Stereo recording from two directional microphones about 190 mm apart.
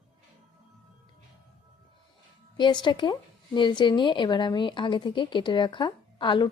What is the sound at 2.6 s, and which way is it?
Speech, 25° left (ahead or behind).